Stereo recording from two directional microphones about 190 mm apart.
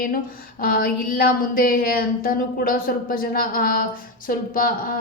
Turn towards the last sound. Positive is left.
turn(degrees=50)  # may be behind; listen again after turning